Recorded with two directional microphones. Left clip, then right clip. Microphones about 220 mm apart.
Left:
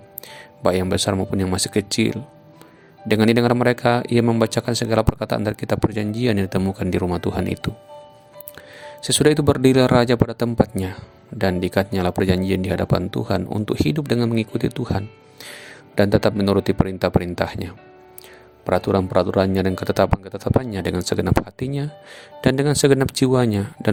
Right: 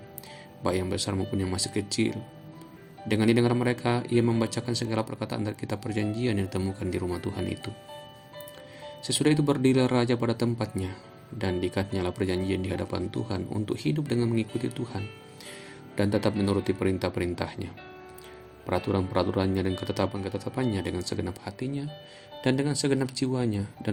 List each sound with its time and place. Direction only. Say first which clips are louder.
0.6 s speech: left 10 dB; 50° left (ahead or behind)
9.0 s speech: left 9 dB; 50° left (ahead or behind)